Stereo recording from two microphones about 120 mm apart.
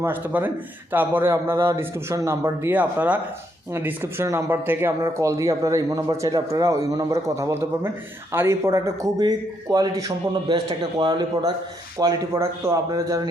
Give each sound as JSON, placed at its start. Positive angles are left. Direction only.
{"t": 0.0, "sound": "a man's voice", "side_deg": -15}
{"t": 2.7, "sound": "a man's voice", "side_deg": -15}